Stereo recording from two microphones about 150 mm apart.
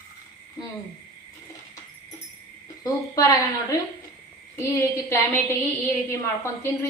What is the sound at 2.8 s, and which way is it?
A woman's voice, 25° left (ahead or behind).